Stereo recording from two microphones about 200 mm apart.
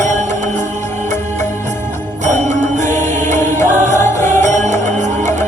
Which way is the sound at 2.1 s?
35° right (ahead or behind).